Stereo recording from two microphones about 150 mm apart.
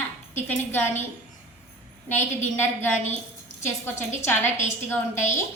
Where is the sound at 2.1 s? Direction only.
15° left (ahead or behind).